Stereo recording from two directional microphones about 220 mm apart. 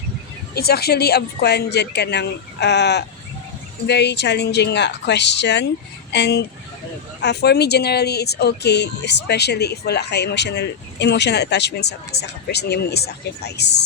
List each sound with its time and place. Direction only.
0.5 s speech: 45° left (ahead or behind)